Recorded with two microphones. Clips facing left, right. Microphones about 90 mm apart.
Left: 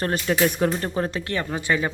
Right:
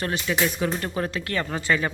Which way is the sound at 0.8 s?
30° left (ahead or behind).